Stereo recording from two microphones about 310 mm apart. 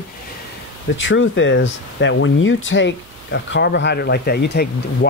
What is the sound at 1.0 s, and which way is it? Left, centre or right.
Speech, left.